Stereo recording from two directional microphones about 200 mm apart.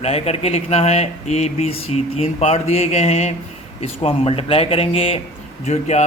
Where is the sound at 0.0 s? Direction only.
30° left (ahead or behind).